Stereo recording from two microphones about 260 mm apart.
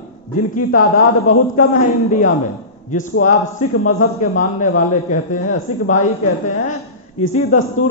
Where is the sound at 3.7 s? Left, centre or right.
Left.